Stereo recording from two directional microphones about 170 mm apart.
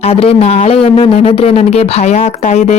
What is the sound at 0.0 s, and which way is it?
Speech, 35° left (ahead or behind).